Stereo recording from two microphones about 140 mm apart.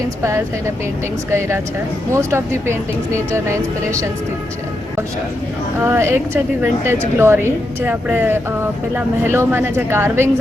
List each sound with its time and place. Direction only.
0.2 s speech: 20° right (ahead or behind)
2.1 s speech: 20° right (ahead or behind)
5.8 s a woman's voice: 15° right (ahead or behind)